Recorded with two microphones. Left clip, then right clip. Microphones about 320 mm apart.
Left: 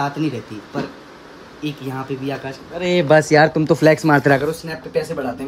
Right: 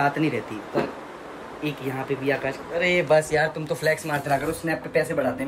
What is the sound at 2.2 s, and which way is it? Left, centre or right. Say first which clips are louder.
Speech: right 2 dB; centre.